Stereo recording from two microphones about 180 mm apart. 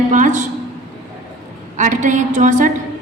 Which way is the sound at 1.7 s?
45° right (ahead or behind).